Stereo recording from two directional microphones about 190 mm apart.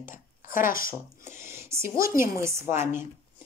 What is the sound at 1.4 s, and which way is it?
Speech, 15° right (ahead or behind).